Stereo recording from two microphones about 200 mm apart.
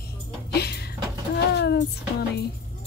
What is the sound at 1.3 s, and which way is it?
Speech, 55° left (ahead or behind).